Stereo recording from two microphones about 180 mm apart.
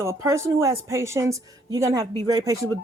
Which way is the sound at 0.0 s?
15° right (ahead or behind).